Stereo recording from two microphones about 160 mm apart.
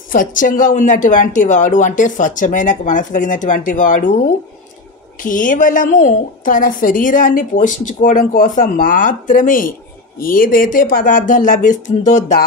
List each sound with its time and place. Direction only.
0.1 s speech: 55° left (ahead or behind)
5.2 s a woman's voice: 55° left (ahead or behind)